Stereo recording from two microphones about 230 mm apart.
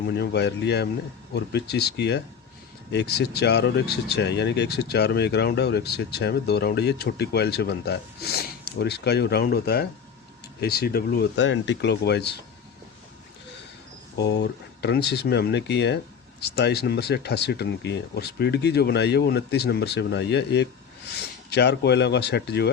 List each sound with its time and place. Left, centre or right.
0.1 s speech: left
14.2 s speech: left